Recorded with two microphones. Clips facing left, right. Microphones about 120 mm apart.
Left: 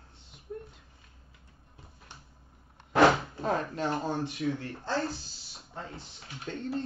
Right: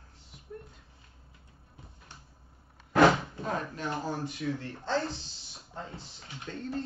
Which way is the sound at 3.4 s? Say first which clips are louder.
Left 4 dB; 35° left (ahead or behind).